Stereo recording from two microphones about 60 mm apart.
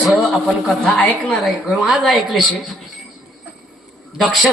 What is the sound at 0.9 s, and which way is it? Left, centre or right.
Speech, left.